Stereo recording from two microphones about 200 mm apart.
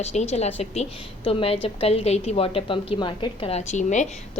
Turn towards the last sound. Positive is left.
turn(degrees=35)  # may be behind; listen again after turning